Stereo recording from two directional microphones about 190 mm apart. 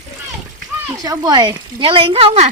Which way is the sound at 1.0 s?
20° right (ahead or behind).